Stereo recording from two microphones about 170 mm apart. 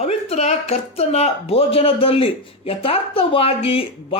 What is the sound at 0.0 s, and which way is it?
A woman's voice, 40° left (ahead or behind).